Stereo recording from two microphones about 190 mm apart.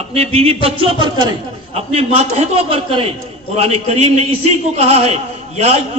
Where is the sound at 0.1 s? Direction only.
30° right (ahead or behind).